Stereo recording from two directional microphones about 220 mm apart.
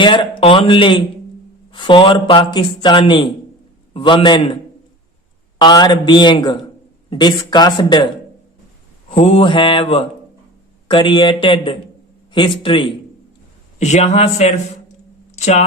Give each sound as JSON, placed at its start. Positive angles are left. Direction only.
{"t": 0.0, "sound": "a man's voice", "side_deg": 20}
{"t": 5.5, "sound": "a man's voice", "side_deg": 20}